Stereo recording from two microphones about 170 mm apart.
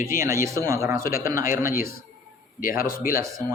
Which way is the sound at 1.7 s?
60° left (ahead or behind).